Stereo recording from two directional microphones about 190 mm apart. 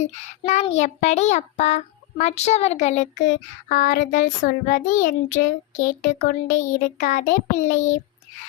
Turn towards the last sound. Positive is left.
turn(degrees=40)  # may be behind; listen again after turning